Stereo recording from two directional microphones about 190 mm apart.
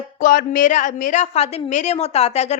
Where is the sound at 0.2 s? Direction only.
45° left (ahead or behind).